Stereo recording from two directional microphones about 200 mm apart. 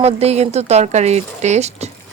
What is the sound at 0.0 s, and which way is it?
Speech, 30° right (ahead or behind).